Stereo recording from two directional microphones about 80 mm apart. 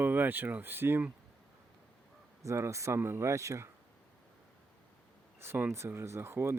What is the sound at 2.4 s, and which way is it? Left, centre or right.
Speech, right.